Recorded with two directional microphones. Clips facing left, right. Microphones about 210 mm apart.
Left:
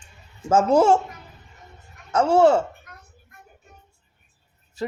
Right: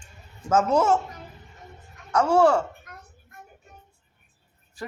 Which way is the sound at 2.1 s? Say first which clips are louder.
Left 3 dB; 25° left (ahead or behind).